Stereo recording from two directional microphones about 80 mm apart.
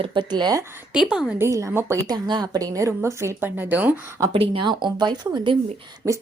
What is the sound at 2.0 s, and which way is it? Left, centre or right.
A woman's voice, right.